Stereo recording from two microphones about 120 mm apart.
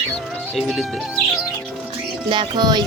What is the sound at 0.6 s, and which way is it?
Speech, centre (ahead or behind).